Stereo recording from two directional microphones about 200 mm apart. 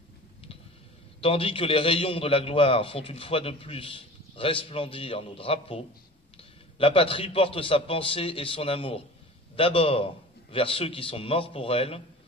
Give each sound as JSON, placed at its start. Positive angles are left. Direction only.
{"t": 1.2, "sound": "a man's voice", "side_deg": 30}